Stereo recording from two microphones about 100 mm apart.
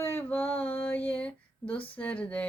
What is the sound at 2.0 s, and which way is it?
Female singing, 15° left (ahead or behind).